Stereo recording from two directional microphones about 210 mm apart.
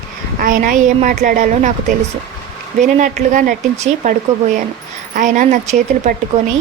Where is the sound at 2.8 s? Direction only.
35° right (ahead or behind).